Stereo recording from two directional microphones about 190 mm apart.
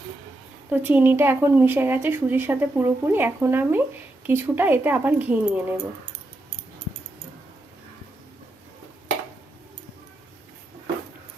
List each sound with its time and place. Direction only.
0.7 s a woman's voice: 10° right (ahead or behind)